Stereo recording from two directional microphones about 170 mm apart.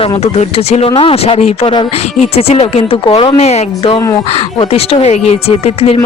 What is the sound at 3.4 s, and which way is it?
A woman's voice, 40° left (ahead or behind).